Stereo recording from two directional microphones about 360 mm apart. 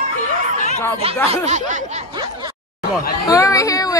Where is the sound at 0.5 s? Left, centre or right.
Centre.